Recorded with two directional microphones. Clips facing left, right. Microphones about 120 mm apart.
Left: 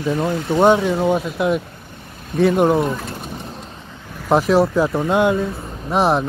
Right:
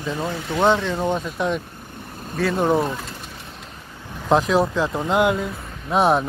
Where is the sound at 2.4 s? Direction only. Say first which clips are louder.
Left 7 dB; 20° left (ahead or behind).